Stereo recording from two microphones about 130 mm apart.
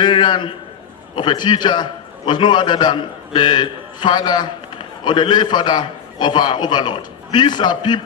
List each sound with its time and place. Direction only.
0.0 s a man's voice: 35° left (ahead or behind)